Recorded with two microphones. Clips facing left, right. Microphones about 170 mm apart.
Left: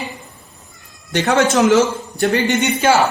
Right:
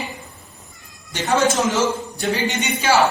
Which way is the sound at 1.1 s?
65° left (ahead or behind).